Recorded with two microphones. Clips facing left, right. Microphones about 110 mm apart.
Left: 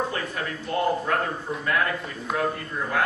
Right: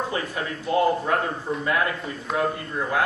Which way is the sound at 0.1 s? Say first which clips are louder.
Right 2 dB; 5° right (ahead or behind).